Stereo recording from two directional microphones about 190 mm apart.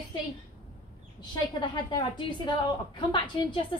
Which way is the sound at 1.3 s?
25° left (ahead or behind).